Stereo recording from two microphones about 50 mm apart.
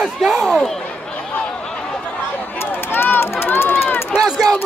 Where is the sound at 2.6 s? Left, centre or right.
Left.